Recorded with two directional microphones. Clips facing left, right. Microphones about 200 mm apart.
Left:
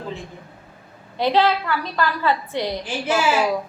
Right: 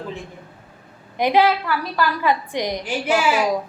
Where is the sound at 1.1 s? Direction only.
15° right (ahead or behind).